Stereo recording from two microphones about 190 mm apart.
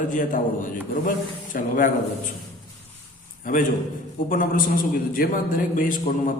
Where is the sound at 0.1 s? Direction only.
45° left (ahead or behind).